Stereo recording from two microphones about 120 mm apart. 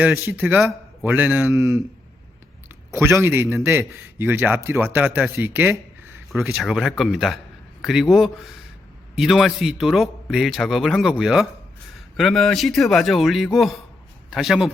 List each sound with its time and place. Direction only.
0.2 s a man's voice: 20° right (ahead or behind)
6.4 s a man's voice: centre (ahead or behind)